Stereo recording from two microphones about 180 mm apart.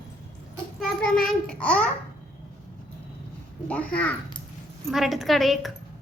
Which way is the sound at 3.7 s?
5° left (ahead or behind).